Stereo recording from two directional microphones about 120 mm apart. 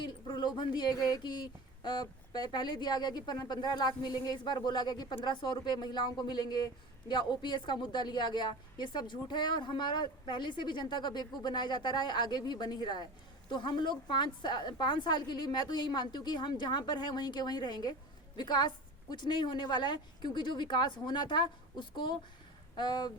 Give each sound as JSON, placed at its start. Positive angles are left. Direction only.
{"t": 0.0, "sound": "a woman's voice", "side_deg": 40}